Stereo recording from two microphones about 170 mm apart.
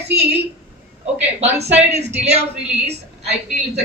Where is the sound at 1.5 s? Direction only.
40° right (ahead or behind).